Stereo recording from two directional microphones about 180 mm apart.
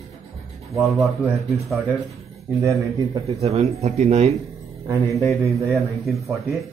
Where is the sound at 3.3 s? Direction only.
35° right (ahead or behind).